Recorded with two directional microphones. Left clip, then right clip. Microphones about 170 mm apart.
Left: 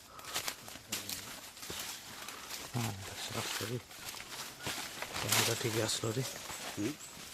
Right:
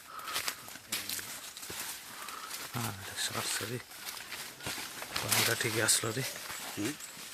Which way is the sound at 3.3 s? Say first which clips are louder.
Right 2 dB; 10° right (ahead or behind).